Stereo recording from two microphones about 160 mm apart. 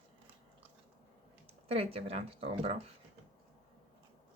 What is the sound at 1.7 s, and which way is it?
Speech, 35° right (ahead or behind).